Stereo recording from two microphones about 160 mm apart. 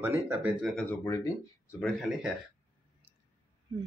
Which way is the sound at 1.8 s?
5° left (ahead or behind).